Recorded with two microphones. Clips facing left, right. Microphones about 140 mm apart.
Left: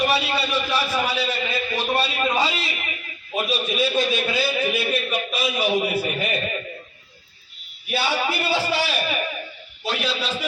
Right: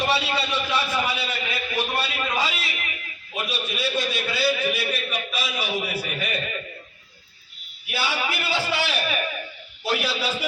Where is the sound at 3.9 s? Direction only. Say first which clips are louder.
Left 4 dB; 50° left (ahead or behind).